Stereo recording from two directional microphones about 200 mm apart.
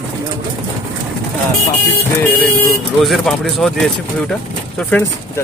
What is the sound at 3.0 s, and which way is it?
Speech, centre (ahead or behind).